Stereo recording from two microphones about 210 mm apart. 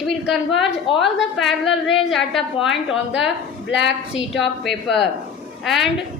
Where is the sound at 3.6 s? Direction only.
55° left (ahead or behind).